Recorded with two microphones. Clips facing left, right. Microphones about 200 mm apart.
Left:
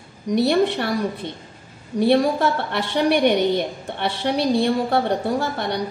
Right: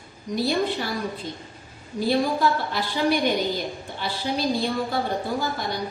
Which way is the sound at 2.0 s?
65° left (ahead or behind).